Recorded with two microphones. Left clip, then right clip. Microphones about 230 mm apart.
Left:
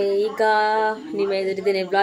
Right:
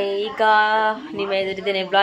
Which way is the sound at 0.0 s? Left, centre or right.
Centre.